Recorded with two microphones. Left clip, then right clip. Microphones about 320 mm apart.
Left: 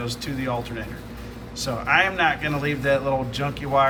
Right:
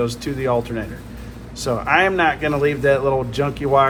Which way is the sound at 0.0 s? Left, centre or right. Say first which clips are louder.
Right 7 dB; centre.